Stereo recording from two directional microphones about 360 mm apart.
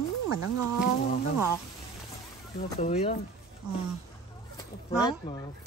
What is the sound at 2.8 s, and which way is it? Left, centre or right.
Speech, centre.